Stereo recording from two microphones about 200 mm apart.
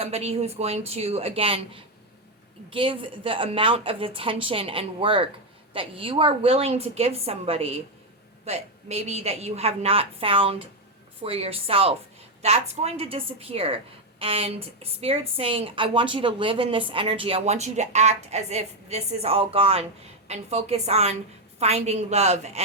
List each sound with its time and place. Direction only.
0.0 s a woman's voice: 30° right (ahead or behind)